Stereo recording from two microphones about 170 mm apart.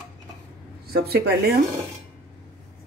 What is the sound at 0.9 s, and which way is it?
Speech, 70° right (ahead or behind).